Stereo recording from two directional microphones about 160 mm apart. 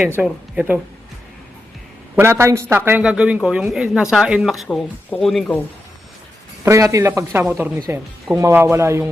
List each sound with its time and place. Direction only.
0.2 s speech: 10° right (ahead or behind)
2.1 s a woman's voice: 15° right (ahead or behind); by 5.5 s centre (ahead or behind)
6.7 s speech: 20° right (ahead or behind)